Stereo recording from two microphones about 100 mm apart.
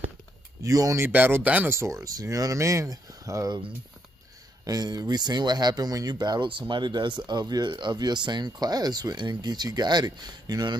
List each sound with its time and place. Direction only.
0.6 s speech: 35° right (ahead or behind)
1.0 s speech: 20° right (ahead or behind)
4.6 s speech: 40° right (ahead or behind)